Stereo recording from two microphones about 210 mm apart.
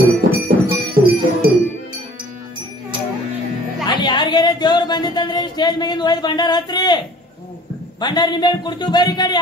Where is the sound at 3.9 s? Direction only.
20° left (ahead or behind).